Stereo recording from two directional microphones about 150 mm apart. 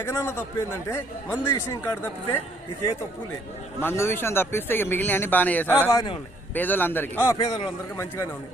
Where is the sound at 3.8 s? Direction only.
15° left (ahead or behind).